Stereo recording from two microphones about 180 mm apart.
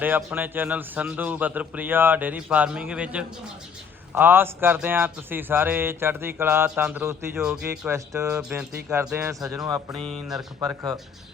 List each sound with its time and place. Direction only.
0.0 s a man's voice: 10° right (ahead or behind)
7.7 s a man's voice: 15° right (ahead or behind)
8.4 s a sound: 5° right (ahead or behind)
8.9 s a man's voice: 15° right (ahead or behind)
9.9 s a sound: centre (ahead or behind)
10.6 s speech: 20° right (ahead or behind)